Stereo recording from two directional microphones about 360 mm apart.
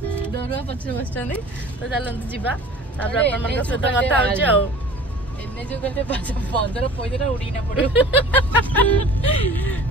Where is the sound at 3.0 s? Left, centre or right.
Centre.